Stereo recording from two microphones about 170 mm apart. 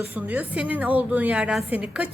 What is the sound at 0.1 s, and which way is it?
A woman's voice, 10° right (ahead or behind).